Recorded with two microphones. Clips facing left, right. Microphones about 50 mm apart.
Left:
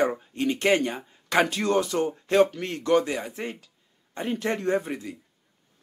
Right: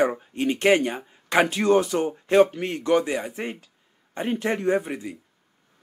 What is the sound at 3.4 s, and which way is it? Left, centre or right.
A man's voice, right.